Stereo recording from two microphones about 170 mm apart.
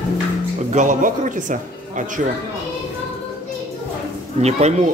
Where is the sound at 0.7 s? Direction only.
45° right (ahead or behind).